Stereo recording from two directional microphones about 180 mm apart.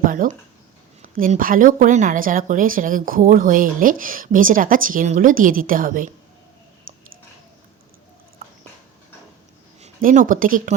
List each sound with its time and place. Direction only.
0.0 s speech: 50° right (ahead or behind)
9.8 s speech: 45° right (ahead or behind)